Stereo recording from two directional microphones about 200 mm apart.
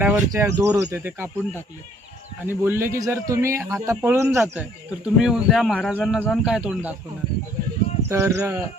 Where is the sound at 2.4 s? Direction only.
10° right (ahead or behind).